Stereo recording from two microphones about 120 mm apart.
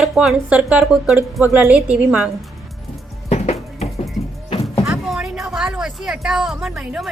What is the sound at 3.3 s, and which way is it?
Music, 65° left (ahead or behind).